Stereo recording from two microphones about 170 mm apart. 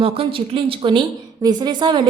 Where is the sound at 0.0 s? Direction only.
35° right (ahead or behind).